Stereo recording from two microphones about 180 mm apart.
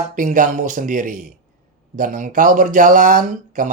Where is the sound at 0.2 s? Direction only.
45° right (ahead or behind).